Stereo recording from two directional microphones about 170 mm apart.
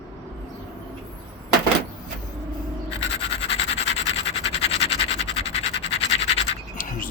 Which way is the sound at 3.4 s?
35° left (ahead or behind).